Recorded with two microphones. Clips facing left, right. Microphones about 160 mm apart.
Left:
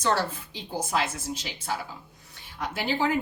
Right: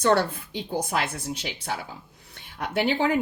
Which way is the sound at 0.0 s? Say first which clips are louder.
Right 5 dB; 60° right (ahead or behind).